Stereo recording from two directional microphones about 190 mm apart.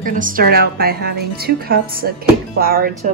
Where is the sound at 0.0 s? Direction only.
45° right (ahead or behind).